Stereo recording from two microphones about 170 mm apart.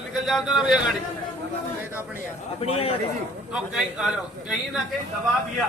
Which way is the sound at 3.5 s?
5° right (ahead or behind).